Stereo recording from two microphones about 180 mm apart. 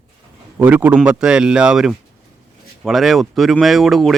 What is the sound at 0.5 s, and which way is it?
A man's voice, 10° right (ahead or behind).